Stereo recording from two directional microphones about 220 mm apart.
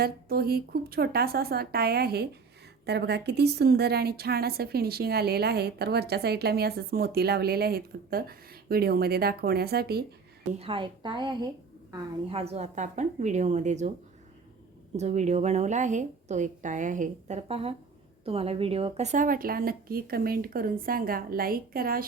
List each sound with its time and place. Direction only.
0.0 s a woman's voice: 45° right (ahead or behind)
10.6 s a woman's voice: 25° right (ahead or behind)
14.9 s speech: 30° right (ahead or behind)